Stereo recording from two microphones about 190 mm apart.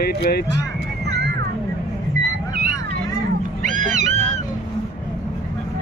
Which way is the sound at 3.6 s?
40° right (ahead or behind).